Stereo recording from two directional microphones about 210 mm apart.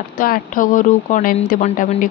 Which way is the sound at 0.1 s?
40° left (ahead or behind).